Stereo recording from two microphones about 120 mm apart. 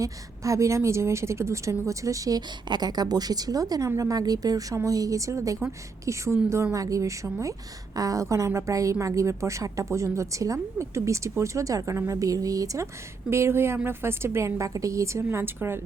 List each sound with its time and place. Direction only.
0.0 s a woman's voice: 25° right (ahead or behind)